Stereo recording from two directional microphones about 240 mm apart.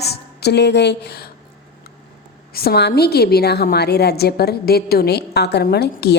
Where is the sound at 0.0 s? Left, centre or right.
Left.